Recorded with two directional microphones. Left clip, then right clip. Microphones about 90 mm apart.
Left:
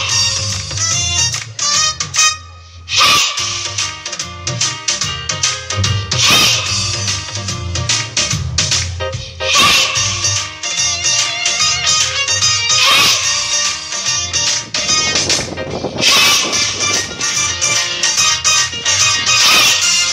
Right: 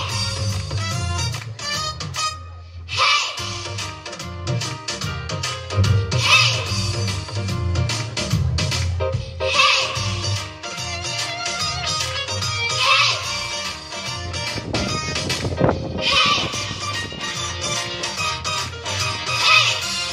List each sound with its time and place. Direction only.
0.2 s music: 40° right (ahead or behind)
0.5 s music: 5° left (ahead or behind)
7.8 s music: 5° left (ahead or behind)
14.7 s music: 35° right (ahead or behind)
16.0 s music: 15° left (ahead or behind)